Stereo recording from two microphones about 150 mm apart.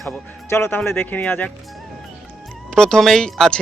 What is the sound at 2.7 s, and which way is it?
Speech, 5° left (ahead or behind).